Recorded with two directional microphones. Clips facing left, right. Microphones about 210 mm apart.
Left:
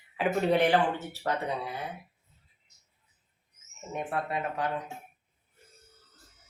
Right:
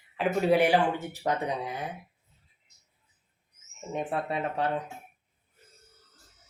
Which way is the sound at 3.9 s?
25° right (ahead or behind).